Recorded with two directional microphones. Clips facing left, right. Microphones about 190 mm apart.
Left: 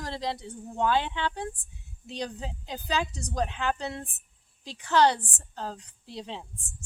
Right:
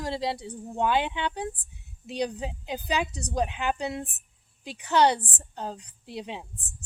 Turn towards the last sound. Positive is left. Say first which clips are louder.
# right 2 dB
turn(degrees=-15)  # may be behind; listen again after turning